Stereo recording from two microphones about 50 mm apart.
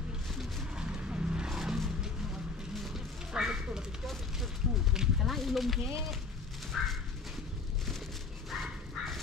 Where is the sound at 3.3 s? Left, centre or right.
Centre.